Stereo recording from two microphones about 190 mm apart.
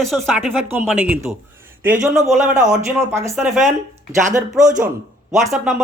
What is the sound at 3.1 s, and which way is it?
Speech, 15° right (ahead or behind).